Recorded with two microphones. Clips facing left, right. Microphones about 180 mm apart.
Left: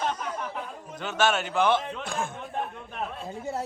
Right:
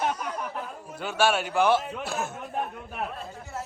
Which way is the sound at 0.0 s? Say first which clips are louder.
Right 1 dB; 10° right (ahead or behind).